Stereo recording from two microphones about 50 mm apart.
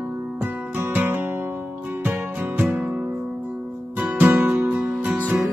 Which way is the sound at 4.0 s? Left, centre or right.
Right.